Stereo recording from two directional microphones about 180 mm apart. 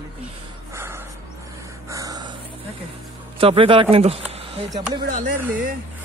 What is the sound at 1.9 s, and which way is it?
Dog, 20° right (ahead or behind).